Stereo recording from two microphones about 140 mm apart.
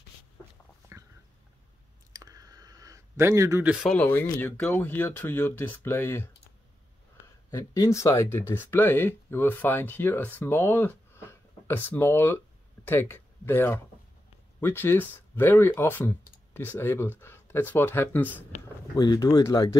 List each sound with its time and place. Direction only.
2.1 s a sound: 25° right (ahead or behind)
4.0 s speech: 15° left (ahead or behind)
7.5 s speech: 20° left (ahead or behind)
18.9 s speech: 25° left (ahead or behind)